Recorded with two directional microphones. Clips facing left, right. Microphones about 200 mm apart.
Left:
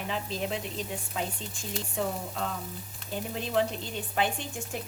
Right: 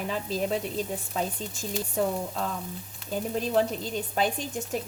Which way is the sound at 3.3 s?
40° right (ahead or behind).